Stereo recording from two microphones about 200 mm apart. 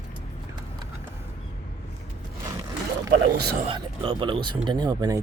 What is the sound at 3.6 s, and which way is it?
Speech, 25° right (ahead or behind).